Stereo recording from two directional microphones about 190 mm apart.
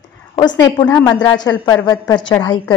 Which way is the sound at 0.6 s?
15° left (ahead or behind).